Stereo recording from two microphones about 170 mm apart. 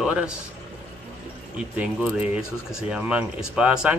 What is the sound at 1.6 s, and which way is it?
Speech, 5° right (ahead or behind).